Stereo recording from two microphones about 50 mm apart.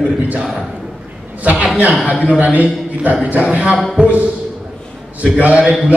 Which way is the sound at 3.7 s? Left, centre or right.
Centre.